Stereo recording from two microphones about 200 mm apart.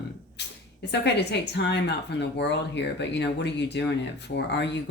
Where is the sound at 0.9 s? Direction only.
55° left (ahead or behind).